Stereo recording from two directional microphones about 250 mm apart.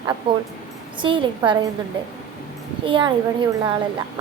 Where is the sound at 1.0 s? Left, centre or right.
Centre.